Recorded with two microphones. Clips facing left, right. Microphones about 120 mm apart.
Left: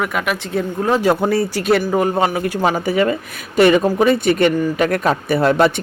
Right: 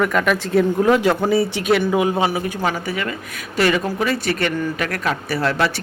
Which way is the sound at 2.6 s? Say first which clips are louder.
Left 6 dB; 25° left (ahead or behind).